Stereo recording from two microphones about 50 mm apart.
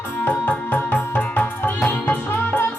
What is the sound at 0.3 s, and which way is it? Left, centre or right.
Music, left.